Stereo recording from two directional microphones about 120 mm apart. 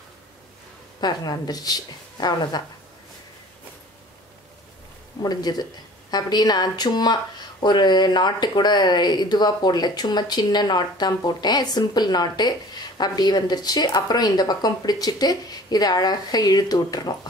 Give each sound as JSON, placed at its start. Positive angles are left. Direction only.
{"t": 1.0, "sound": "speech", "side_deg": 35}
{"t": 5.2, "sound": "speech", "side_deg": 35}